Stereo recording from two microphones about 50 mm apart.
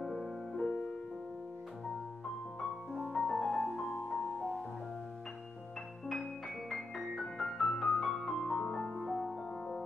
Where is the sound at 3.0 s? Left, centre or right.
Centre.